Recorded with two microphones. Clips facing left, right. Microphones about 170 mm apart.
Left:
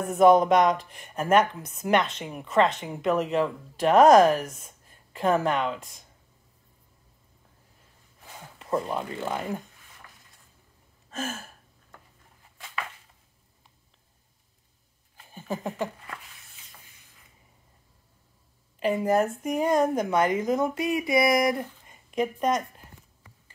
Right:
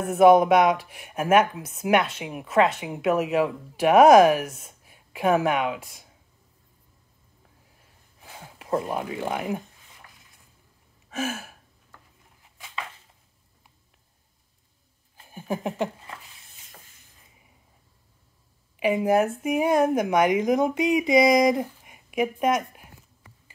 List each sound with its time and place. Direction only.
0.0 s speech: 5° right (ahead or behind)
8.2 s speech: 15° right (ahead or behind)
11.1 s gasp: 10° right (ahead or behind)
15.3 s speech: 15° right (ahead or behind)
18.8 s speech: 10° right (ahead or behind)